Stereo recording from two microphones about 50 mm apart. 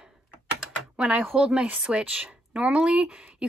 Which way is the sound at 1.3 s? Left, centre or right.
Centre.